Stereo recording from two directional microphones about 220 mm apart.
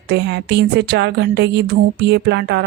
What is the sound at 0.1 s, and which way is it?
Speech, 50° right (ahead or behind).